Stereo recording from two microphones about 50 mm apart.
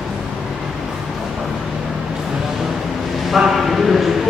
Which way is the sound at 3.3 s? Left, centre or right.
Centre.